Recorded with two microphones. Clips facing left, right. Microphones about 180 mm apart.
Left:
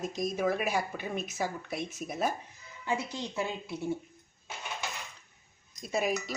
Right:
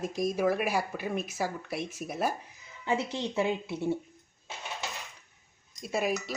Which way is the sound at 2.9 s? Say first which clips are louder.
Right 3 dB; 25° right (ahead or behind).